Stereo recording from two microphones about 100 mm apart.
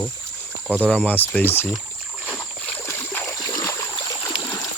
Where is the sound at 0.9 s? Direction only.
15° left (ahead or behind).